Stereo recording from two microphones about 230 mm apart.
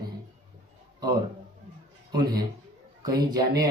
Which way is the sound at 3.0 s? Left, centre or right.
Centre.